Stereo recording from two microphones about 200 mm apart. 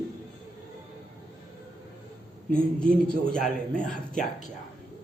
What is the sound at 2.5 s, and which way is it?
Speech, 5° left (ahead or behind).